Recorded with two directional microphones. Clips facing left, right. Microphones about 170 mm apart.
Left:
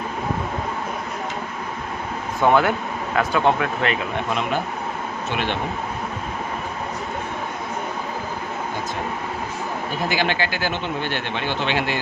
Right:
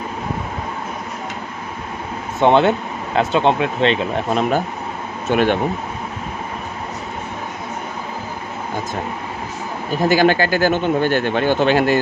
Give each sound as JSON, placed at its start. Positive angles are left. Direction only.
{"t": 2.4, "sound": "speech", "side_deg": -25}
{"t": 4.3, "sound": "speech", "side_deg": -40}
{"t": 10.0, "sound": "speech", "side_deg": -45}